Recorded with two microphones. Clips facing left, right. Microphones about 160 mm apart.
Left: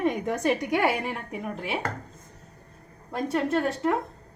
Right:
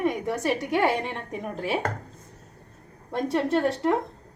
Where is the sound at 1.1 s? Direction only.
40° right (ahead or behind).